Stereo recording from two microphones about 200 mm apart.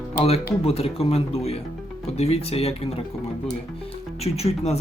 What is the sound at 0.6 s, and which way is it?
Speech, 30° left (ahead or behind).